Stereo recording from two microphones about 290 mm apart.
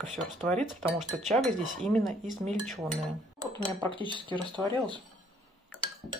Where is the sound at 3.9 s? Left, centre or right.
Centre.